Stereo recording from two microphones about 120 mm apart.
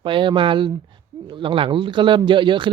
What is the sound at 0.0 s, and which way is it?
Speech, 45° right (ahead or behind).